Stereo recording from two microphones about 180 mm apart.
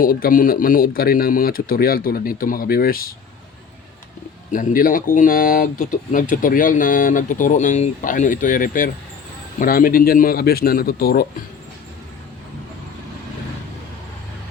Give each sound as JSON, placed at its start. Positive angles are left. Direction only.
{"t": 0.0, "sound": "speech", "side_deg": 50}
{"t": 4.5, "sound": "a man's voice", "side_deg": 50}